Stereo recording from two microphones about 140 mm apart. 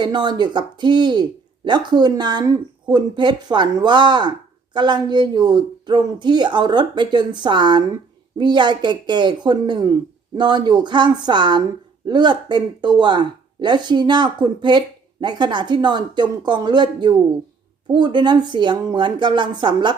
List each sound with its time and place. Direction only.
0.0 s speech: 30° right (ahead or behind)